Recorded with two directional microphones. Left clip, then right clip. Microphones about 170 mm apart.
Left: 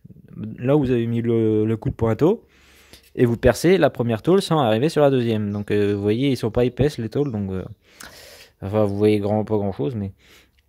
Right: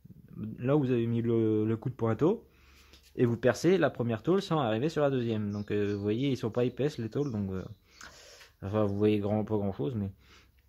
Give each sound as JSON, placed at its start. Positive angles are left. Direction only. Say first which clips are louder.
{"t": 0.4, "sound": "speech", "louder": "left 9 dB", "side_deg": 40}